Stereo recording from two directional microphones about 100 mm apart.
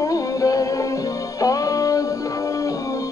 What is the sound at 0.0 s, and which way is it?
Music, 35° left (ahead or behind).